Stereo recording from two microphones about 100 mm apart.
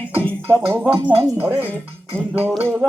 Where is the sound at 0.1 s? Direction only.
15° left (ahead or behind).